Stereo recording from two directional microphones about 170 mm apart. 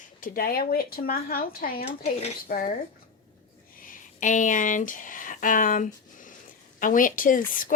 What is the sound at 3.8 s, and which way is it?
Speech, 50° left (ahead or behind).